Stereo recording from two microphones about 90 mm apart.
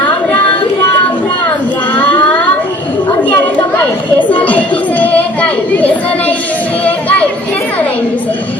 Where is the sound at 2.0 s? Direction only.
15° left (ahead or behind).